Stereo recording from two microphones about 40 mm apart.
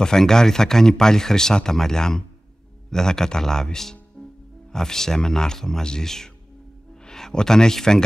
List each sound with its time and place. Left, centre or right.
0.0 s speech: centre